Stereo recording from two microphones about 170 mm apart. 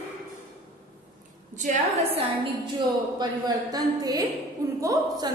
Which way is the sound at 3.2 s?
25° right (ahead or behind).